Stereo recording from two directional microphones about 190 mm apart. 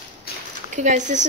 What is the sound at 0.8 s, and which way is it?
Speech, 40° right (ahead or behind).